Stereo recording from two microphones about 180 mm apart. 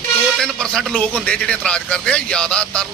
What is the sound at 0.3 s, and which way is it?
A man's voice, 5° left (ahead or behind).